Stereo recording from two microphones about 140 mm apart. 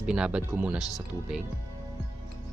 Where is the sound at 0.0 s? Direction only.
5° right (ahead or behind).